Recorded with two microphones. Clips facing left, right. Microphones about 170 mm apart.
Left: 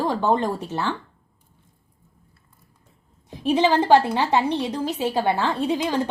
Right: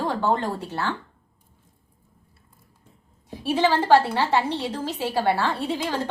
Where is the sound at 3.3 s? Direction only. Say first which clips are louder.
Left 2 dB; 20° left (ahead or behind).